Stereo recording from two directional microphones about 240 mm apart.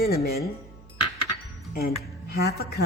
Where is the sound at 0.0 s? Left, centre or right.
Left.